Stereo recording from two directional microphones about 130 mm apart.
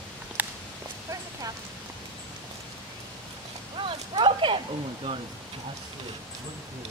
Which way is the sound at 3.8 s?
40° right (ahead or behind).